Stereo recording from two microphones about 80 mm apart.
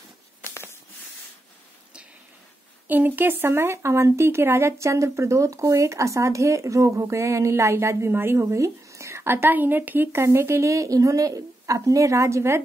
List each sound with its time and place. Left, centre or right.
2.9 s speech: right